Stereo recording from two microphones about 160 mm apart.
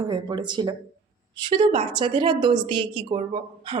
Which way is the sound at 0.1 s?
30° right (ahead or behind).